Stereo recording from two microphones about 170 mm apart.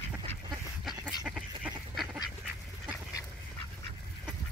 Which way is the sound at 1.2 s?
Centre (ahead or behind).